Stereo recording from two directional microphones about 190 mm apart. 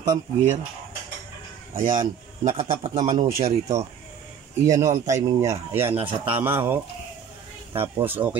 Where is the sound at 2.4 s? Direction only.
35° right (ahead or behind).